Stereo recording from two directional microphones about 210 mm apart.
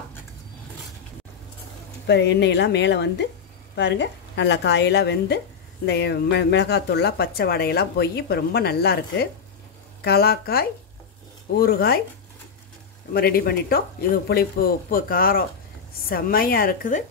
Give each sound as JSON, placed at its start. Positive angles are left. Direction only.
{"t": 2.0, "sound": "a woman's voice", "side_deg": 55}
{"t": 13.1, "sound": "speech", "side_deg": 45}